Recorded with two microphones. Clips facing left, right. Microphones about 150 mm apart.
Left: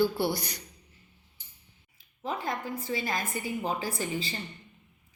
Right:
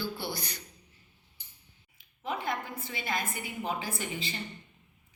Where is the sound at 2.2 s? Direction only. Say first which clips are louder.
Left 1 dB; 40° left (ahead or behind).